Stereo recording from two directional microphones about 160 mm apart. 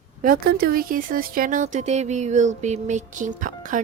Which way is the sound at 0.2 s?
65° right (ahead or behind).